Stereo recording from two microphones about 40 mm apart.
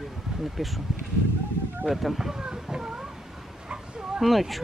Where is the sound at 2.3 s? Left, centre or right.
Centre.